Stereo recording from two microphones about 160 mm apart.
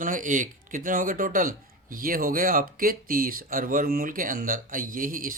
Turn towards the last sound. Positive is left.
turn(degrees=-60)  # may be behind; listen again after turning